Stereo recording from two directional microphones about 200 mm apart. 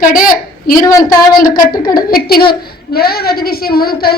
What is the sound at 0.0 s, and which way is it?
Speech, 45° left (ahead or behind).